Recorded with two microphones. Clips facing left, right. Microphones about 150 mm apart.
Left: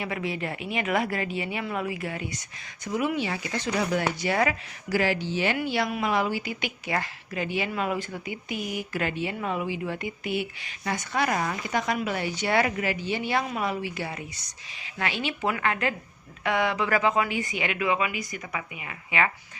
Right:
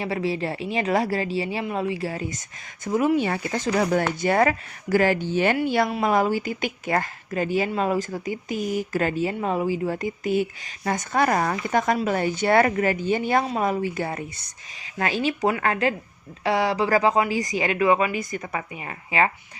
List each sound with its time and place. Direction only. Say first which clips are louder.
0.0 s speech: right 5 dB; 35° right (ahead or behind)
2.8 s speech: right 6 dB; 45° right (ahead or behind)
14.9 s speech: right 6 dB; 40° right (ahead or behind)